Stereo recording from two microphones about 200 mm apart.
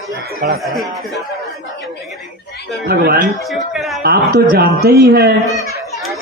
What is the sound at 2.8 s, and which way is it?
A man's voice, 50° right (ahead or behind).